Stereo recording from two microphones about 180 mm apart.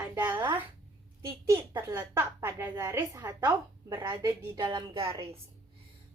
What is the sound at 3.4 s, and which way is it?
A woman's voice, 25° right (ahead or behind).